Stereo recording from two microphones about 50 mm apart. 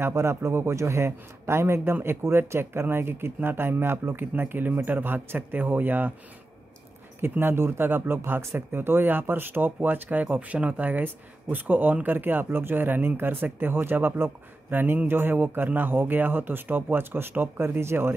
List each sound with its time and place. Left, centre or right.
0.1 s a man's voice: right
7.2 s speech: right